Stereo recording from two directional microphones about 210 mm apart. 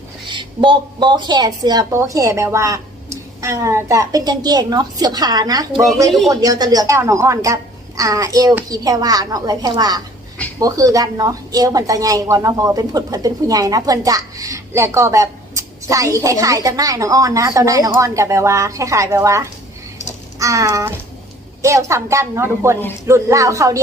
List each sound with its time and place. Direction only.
0.3 s speech: 25° right (ahead or behind)
6.1 s speech: centre (ahead or behind)
6.3 s speech: 15° right (ahead or behind)